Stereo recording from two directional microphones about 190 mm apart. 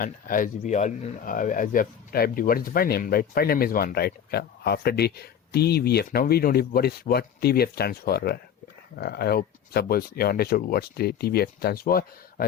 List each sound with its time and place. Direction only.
0.0 s speech: 45° left (ahead or behind)